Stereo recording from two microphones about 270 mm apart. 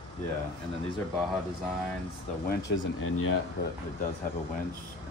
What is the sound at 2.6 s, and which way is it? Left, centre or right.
Speech, left.